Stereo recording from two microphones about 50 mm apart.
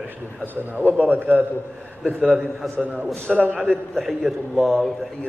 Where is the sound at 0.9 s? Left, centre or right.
Right.